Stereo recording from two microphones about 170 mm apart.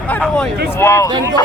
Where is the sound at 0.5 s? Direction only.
75° right (ahead or behind).